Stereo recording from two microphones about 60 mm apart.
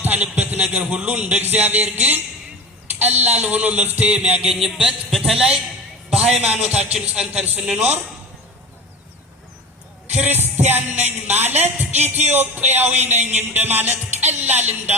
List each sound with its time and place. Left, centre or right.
0.0 s a man's voice: right
4.6 s a man's voice: centre
6.1 s a sound: centre
6.4 s a man's voice: right
10.2 s music: right